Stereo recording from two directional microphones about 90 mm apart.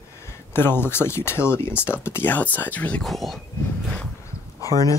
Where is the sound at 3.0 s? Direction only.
Centre (ahead or behind).